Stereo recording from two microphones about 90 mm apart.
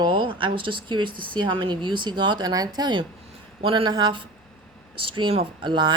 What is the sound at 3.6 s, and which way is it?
Speech, 90° right.